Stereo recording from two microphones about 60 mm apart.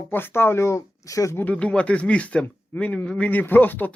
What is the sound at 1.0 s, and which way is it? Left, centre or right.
Speech, left.